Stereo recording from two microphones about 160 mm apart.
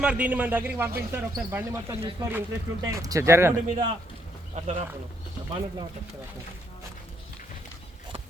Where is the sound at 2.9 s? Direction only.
20° right (ahead or behind).